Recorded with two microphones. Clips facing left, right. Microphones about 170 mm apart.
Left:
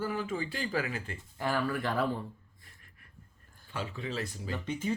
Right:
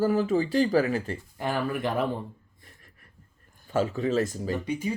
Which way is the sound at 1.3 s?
20° right (ahead or behind).